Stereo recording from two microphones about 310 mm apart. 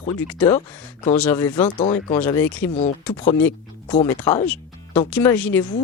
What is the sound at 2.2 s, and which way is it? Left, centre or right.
Speech, centre.